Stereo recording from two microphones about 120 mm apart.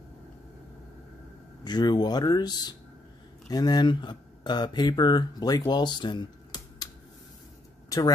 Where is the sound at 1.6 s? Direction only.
35° left (ahead or behind).